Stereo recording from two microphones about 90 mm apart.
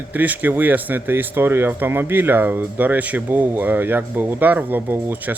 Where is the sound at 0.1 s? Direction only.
20° right (ahead or behind).